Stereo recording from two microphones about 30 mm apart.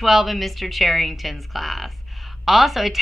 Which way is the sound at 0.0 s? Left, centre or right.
Centre.